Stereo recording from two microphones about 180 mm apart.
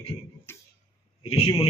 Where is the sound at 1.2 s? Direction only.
30° left (ahead or behind).